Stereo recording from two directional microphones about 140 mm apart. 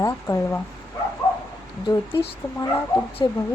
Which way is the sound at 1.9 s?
25° left (ahead or behind).